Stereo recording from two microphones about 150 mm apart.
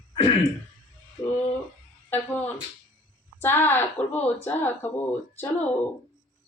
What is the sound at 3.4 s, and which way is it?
Speech, 15° left (ahead or behind).